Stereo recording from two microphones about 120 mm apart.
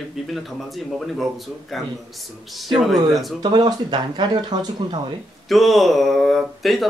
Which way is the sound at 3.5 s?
40° right (ahead or behind).